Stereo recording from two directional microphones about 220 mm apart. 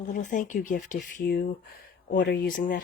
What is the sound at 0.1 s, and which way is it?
Speech, 35° left (ahead or behind).